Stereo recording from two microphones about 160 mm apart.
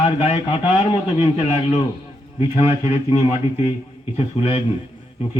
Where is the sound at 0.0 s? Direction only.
35° left (ahead or behind).